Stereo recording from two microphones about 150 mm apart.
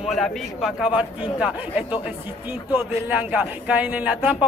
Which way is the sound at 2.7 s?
10° right (ahead or behind).